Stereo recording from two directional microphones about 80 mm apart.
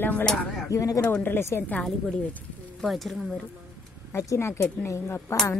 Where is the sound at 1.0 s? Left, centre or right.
Left.